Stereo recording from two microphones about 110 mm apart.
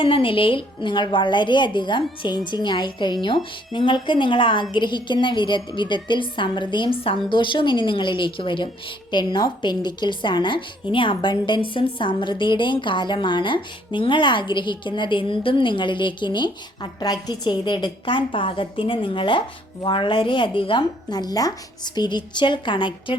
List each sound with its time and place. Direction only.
0.0 s a woman's voice: 50° left (ahead or behind)